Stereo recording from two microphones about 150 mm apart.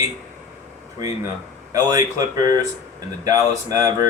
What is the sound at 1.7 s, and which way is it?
Speech, 20° right (ahead or behind).